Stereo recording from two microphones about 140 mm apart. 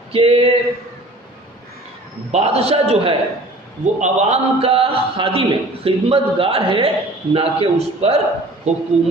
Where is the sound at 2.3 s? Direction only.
50° right (ahead or behind).